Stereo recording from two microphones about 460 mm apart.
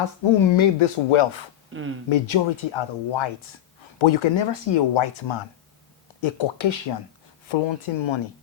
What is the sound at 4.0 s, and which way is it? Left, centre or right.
Speech, left.